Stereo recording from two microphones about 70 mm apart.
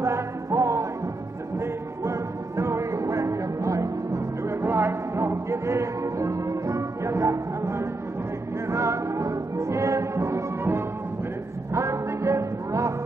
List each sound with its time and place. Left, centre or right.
0.5 s music: right
2.0 s music: right
4.6 s music: right